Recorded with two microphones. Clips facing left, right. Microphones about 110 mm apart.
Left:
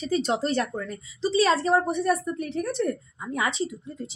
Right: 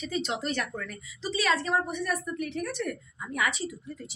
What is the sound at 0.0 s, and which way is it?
A woman's voice, 35° left (ahead or behind).